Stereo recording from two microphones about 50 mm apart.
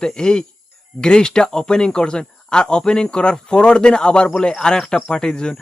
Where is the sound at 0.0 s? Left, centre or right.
Centre.